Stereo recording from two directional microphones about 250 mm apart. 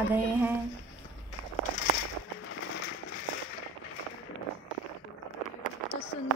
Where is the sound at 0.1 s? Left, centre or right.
Centre.